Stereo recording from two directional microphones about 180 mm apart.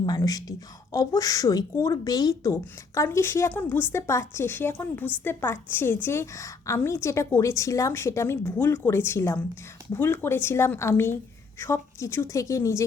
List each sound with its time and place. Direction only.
0.0 s a woman's voice: 20° left (ahead or behind)